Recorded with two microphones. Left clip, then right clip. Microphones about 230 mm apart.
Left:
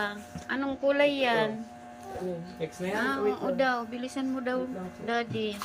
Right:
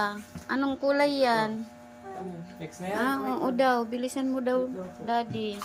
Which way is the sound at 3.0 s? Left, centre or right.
Right.